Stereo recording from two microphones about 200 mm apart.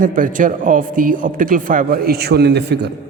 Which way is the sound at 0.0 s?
40° right (ahead or behind).